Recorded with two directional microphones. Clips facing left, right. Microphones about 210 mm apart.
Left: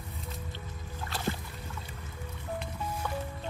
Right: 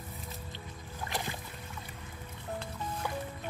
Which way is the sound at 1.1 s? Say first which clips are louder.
Right 3 dB; 15° right (ahead or behind).